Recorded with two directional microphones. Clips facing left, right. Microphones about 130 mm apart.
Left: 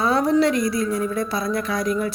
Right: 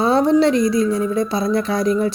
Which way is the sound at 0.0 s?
25° right (ahead or behind).